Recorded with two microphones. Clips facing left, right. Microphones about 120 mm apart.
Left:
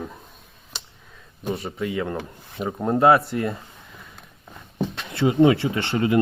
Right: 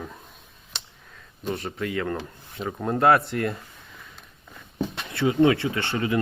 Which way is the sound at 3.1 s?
5° left (ahead or behind).